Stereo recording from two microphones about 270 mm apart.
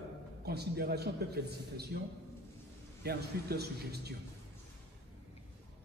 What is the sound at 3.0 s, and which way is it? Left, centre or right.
A man's voice, right.